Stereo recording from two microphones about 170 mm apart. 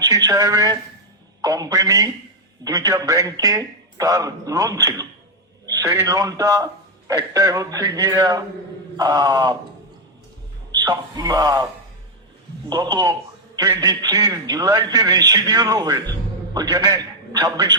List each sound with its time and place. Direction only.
0.0 s a man's voice: 20° right (ahead or behind)
10.7 s a man's voice: 25° right (ahead or behind)